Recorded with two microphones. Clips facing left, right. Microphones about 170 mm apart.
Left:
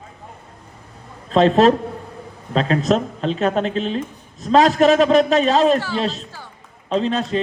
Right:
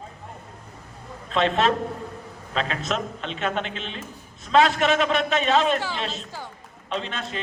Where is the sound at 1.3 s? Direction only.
35° left (ahead or behind).